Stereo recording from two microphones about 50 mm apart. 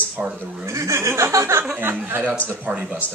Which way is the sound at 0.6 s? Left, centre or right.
Right.